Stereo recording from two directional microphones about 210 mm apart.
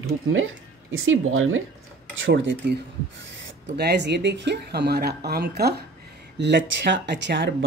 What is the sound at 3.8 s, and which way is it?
Speech, 50° right (ahead or behind).